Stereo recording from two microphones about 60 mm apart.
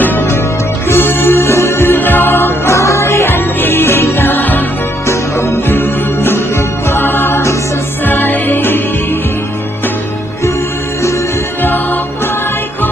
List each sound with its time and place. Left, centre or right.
0.8 s music: left
2.7 s music: left
5.7 s music: left